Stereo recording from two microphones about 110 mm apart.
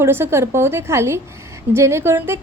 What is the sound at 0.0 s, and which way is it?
A woman's voice, 20° right (ahead or behind).